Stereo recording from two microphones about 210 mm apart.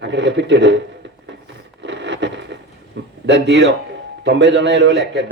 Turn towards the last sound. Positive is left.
turn(degrees=-55)  # may be behind; listen again after turning